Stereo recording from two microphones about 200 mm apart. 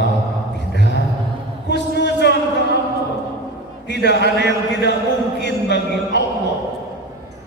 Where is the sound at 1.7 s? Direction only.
60° left (ahead or behind).